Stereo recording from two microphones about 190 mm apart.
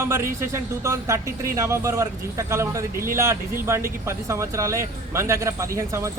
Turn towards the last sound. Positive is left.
turn(degrees=-15)  # may be behind; listen again after turning